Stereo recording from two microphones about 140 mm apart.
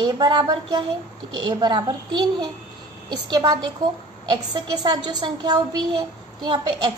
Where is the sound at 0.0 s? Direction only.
30° right (ahead or behind).